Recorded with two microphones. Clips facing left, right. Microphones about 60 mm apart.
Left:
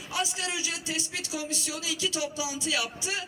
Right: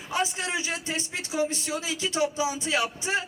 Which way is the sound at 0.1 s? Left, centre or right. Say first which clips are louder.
Right 4 dB; right.